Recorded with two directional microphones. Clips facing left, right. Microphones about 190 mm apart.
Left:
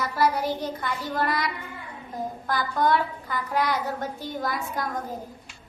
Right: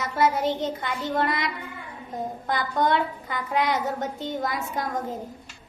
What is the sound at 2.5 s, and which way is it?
A woman's voice, 20° right (ahead or behind).